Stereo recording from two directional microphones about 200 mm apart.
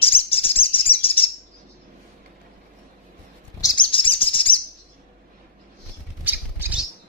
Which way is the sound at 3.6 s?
25° left (ahead or behind).